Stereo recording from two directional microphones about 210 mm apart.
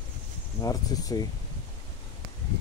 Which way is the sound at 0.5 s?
15° left (ahead or behind).